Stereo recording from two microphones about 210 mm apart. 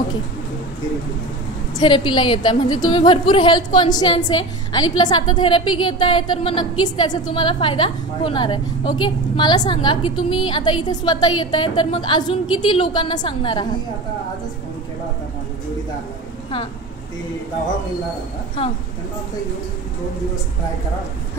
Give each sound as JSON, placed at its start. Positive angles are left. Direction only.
{"t": 1.8, "sound": "a woman's voice", "side_deg": 20}